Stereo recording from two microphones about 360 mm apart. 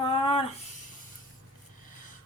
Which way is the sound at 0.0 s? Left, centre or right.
Centre.